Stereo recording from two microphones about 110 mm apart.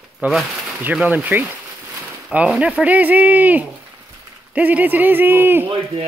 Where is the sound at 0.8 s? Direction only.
15° right (ahead or behind).